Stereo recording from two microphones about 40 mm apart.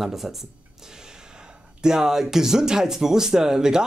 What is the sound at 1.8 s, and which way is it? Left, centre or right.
Speech, centre.